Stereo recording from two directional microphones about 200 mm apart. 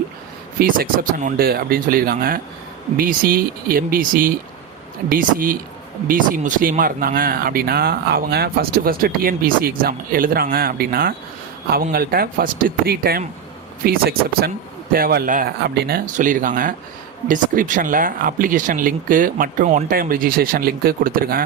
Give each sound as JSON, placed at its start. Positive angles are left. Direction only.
{"t": 0.6, "sound": "speech", "side_deg": -45}